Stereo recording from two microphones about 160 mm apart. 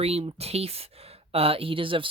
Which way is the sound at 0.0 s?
40° right (ahead or behind).